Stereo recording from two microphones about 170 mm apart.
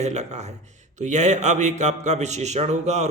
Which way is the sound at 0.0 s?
40° right (ahead or behind).